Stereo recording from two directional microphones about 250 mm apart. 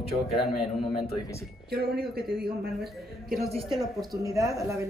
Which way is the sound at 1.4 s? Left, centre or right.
Right.